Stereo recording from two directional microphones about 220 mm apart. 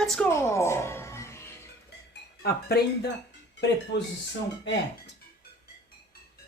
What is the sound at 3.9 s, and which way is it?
Speech, 50° left (ahead or behind).